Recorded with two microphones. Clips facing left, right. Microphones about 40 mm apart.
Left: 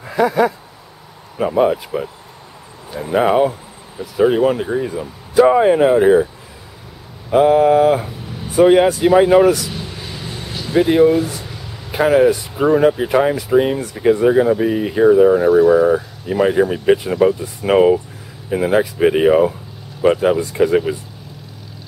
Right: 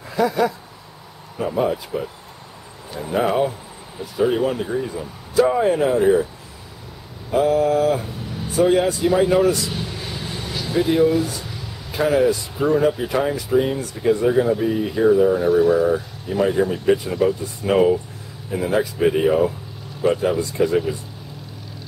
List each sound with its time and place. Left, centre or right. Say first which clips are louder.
0.1 s speech: left 4 dB; left
1.6 s speech: left 6 dB; left
7.2 s speech: left 6 dB; left
10.5 s speech: left 5 dB; left